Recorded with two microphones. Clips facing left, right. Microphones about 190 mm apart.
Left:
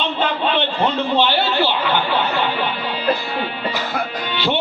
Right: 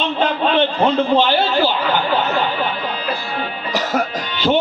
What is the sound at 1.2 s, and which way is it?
Speech, 45° right (ahead or behind).